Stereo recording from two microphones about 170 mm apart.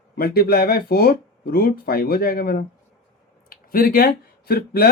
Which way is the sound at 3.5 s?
60° left (ahead or behind).